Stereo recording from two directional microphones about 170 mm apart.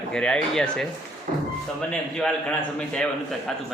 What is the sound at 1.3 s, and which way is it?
Music, 55° right (ahead or behind).